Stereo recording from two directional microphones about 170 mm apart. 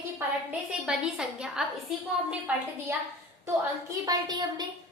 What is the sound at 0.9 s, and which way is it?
Speech, 5° right (ahead or behind).